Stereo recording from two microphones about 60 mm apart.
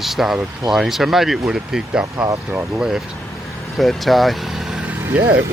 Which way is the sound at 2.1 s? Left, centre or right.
Right.